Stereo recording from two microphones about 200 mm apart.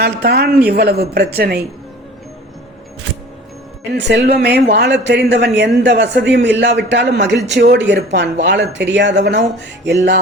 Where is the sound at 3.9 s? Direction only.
60° right (ahead or behind).